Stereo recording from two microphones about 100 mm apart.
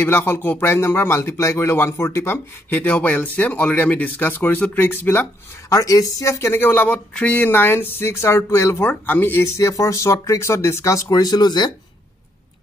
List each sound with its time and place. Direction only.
0.0 s speech: 20° left (ahead or behind)
5.7 s speech: 35° left (ahead or behind)